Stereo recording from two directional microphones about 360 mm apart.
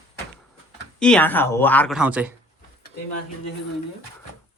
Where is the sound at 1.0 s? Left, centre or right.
Centre.